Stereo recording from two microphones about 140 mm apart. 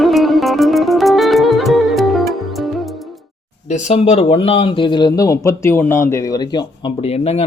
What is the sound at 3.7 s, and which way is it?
Speech, 55° left (ahead or behind).